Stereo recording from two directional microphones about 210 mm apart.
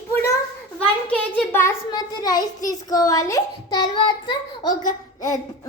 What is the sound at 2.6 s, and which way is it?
Child singing, 15° left (ahead or behind).